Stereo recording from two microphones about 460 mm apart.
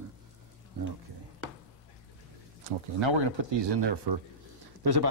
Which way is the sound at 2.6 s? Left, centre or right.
Right.